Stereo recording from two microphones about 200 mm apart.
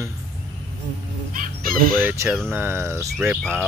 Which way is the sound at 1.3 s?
45° right (ahead or behind).